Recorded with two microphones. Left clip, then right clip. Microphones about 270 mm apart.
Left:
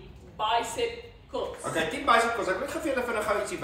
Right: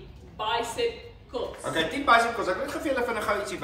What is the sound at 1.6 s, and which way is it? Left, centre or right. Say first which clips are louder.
A man's voice: right 3 dB; centre.